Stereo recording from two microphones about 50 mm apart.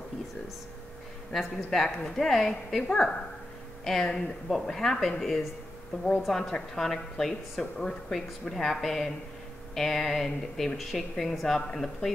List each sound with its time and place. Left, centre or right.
1.3 s a woman's voice: centre